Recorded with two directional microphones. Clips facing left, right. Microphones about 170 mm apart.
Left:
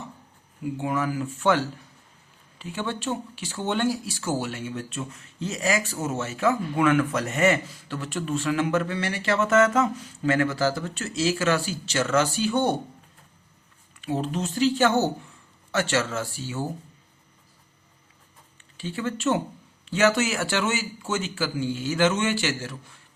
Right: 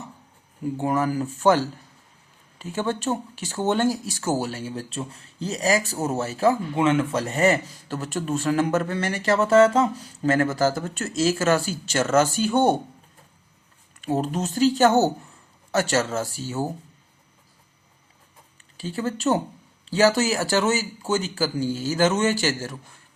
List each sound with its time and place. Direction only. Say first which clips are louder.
0.6 s speech: right 3 dB; 40° right (ahead or behind)
14.0 s speech: right 3 dB; 45° right (ahead or behind)
18.8 s speech: right 2 dB; 40° right (ahead or behind)